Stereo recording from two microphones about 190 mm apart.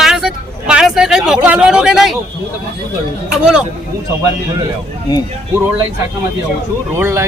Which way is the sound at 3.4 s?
5° right (ahead or behind).